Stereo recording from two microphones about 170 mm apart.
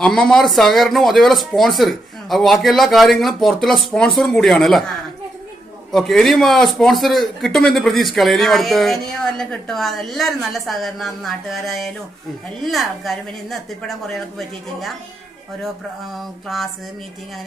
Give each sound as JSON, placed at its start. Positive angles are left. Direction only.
{"t": 0.0, "sound": "a man's voice", "side_deg": 5}
{"t": 5.9, "sound": "a man's voice", "side_deg": 0}
{"t": 16.2, "sound": "a man's voice", "side_deg": 0}